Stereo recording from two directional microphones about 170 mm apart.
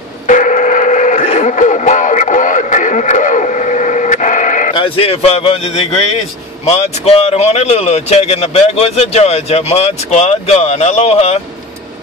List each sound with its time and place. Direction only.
0.3 s radio: 50° left (ahead or behind)
4.7 s speech: 35° left (ahead or behind)